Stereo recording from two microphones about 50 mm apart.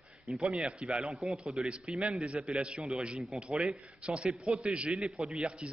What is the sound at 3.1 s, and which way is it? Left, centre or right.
Speech, centre.